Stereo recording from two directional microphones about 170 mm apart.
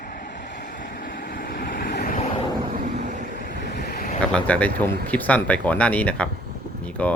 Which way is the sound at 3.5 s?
65° left (ahead or behind).